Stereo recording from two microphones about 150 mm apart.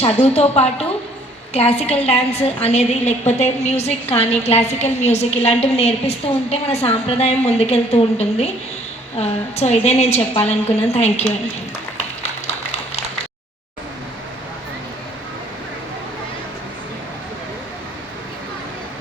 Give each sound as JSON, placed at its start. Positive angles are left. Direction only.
{"t": 0.3, "sound": "a woman's voice", "side_deg": 45}